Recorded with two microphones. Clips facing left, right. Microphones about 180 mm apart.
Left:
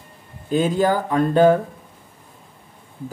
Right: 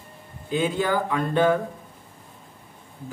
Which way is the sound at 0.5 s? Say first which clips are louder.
Left 5 dB; 40° left (ahead or behind).